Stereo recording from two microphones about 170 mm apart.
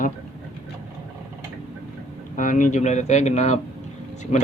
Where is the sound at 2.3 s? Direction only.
50° left (ahead or behind).